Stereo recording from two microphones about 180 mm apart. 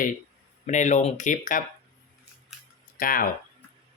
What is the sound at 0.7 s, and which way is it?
Speech, 40° left (ahead or behind).